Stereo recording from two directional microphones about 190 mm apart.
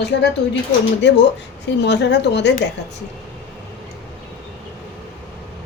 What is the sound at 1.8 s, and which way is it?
Speech, 65° left (ahead or behind).